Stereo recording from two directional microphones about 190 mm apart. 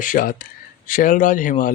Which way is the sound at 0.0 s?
45° left (ahead or behind).